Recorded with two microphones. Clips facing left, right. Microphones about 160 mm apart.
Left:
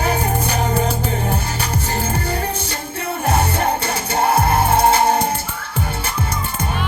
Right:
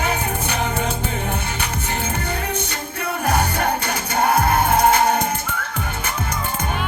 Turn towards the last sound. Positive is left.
turn(degrees=30)  # may be behind; listen again after turning